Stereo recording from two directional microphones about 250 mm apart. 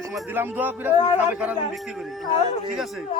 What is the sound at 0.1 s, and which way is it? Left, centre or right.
A woman's voice, centre.